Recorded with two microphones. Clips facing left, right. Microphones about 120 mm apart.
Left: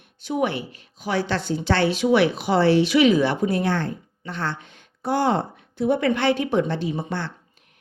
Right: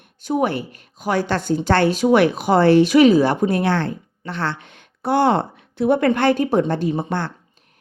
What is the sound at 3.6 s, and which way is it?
A woman's voice, 80° right.